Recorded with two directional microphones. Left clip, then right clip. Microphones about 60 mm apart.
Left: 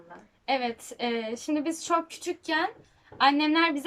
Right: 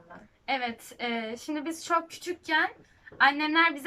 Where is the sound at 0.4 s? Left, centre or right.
Left.